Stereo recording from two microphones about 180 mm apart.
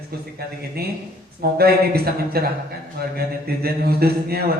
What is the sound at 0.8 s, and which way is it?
A man's voice, 60° right (ahead or behind).